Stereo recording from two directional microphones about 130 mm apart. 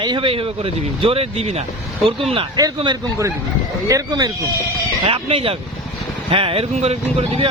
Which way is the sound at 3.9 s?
30° right (ahead or behind).